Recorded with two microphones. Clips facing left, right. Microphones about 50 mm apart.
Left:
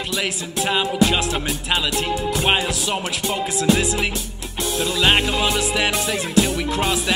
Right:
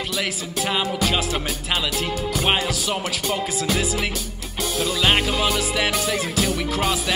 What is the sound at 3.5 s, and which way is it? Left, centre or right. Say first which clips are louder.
Music: left 4 dB; centre.